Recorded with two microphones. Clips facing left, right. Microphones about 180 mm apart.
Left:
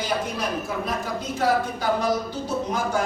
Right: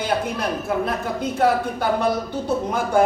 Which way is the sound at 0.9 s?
55° right (ahead or behind).